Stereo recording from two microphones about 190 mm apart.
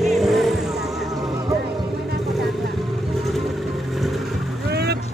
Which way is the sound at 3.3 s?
Centre (ahead or behind).